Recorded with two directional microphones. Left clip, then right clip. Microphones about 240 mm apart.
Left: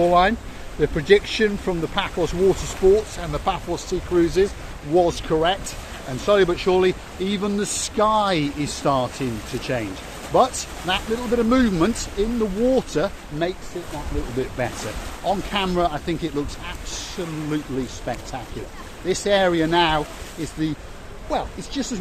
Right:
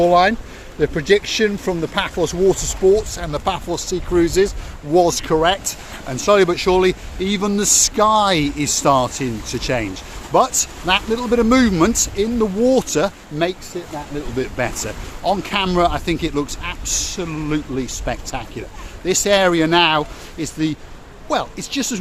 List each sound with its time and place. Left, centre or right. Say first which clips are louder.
0.0 s speech: right 3 dB; right
14.6 s speech: right 4 dB; right